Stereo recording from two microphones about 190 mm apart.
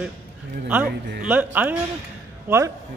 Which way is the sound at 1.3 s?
10° right (ahead or behind).